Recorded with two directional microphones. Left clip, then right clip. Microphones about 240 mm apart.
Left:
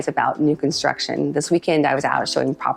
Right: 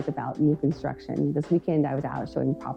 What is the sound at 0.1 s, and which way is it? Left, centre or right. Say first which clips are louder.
Speech: left 8 dB; centre.